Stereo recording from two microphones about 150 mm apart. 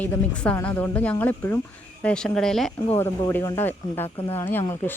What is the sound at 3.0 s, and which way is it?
Speech, 20° left (ahead or behind).